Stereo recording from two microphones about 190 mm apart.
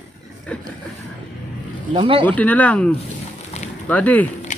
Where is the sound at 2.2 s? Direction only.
10° left (ahead or behind).